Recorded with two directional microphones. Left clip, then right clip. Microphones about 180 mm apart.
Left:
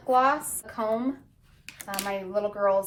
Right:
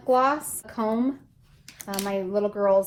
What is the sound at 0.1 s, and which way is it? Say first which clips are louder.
A woman's voice: right 1 dB; 45° right (ahead or behind).